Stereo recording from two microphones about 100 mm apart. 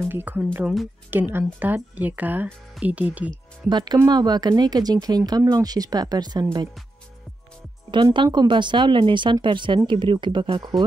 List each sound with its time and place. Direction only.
0.1 s speech: 15° right (ahead or behind)
3.6 s speech: 45° right (ahead or behind)
7.9 s speech: 55° right (ahead or behind)